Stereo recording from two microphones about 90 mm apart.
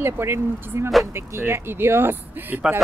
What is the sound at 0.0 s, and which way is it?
Speech, 30° right (ahead or behind).